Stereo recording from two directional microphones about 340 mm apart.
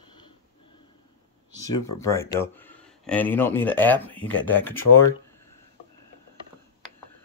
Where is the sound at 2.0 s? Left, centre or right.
Centre.